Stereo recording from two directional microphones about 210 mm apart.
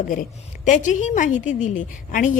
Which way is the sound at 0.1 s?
40° left (ahead or behind).